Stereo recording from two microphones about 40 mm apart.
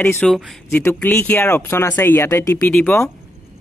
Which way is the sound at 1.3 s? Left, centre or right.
Left.